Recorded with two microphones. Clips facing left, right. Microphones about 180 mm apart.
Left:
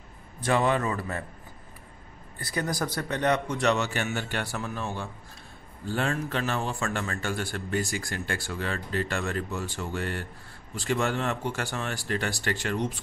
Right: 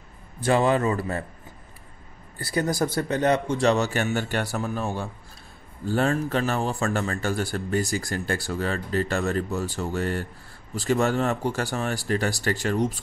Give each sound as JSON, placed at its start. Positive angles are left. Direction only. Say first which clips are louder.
{"t": 0.4, "sound": "a man's voice", "louder": "right 4 dB", "side_deg": -30}
{"t": 2.3, "sound": "a man's voice", "louder": "right 5 dB", "side_deg": -30}